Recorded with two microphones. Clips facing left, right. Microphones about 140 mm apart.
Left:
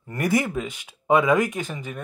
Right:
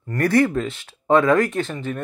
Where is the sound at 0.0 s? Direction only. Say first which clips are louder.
Right 5 dB; 15° left (ahead or behind).